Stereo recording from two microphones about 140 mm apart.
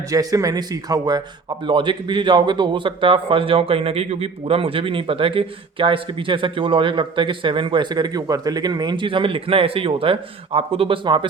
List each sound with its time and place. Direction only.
0.1 s speech: 25° right (ahead or behind)